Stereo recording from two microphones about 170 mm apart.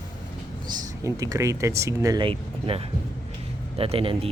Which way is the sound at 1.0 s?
20° right (ahead or behind).